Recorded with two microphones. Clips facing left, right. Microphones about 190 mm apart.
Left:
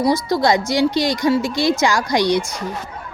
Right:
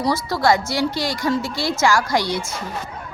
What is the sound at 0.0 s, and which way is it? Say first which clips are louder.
Speech: left 3 dB; 15° left (ahead or behind).